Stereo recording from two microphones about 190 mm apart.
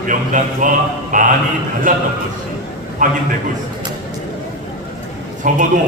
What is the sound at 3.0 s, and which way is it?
Speech, 45° right (ahead or behind).